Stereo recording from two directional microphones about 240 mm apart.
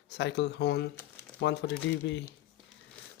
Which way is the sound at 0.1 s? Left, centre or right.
Left.